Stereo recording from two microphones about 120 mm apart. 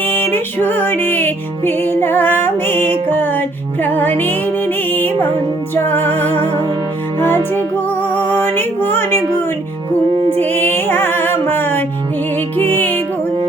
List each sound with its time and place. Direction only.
0.0 s music: 15° left (ahead or behind)
8.1 s music: 15° left (ahead or behind)
10.4 s music: 15° left (ahead or behind)